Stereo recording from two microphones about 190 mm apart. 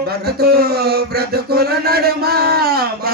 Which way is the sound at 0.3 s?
55° right (ahead or behind).